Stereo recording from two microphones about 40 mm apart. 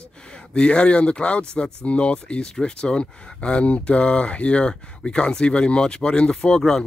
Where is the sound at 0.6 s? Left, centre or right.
Left.